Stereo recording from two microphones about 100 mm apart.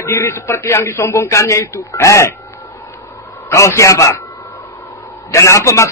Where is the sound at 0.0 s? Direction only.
30° left (ahead or behind).